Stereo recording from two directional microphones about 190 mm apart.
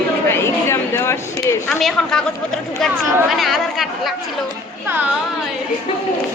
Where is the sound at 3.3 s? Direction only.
Centre (ahead or behind).